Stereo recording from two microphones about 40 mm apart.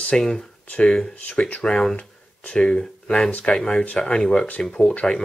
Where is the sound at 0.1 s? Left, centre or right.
Centre.